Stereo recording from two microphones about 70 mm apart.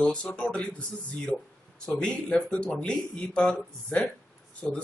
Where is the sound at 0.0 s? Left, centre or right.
Centre.